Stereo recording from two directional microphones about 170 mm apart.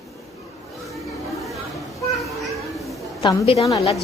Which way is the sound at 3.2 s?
35° left (ahead or behind).